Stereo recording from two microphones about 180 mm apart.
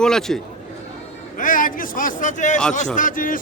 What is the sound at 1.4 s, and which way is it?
Speech, 50° left (ahead or behind).